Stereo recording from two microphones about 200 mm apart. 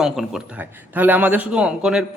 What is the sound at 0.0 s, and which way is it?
A man's voice, centre (ahead or behind).